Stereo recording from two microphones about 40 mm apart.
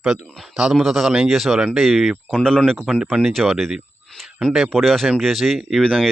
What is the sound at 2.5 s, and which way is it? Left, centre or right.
Speech, centre.